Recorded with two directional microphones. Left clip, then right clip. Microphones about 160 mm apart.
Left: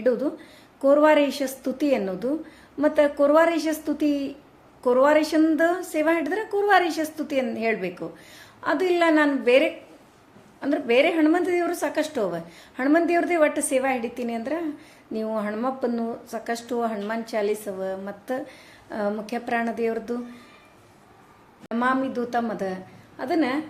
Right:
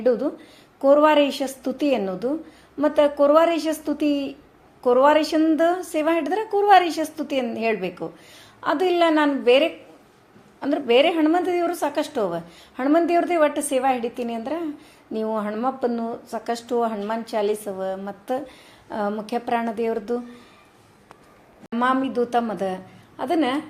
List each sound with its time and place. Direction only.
0.0 s a woman's voice: 10° right (ahead or behind)
21.8 s a woman's voice: 30° right (ahead or behind)